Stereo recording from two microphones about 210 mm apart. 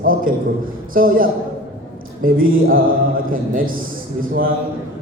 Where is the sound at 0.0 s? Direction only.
40° right (ahead or behind).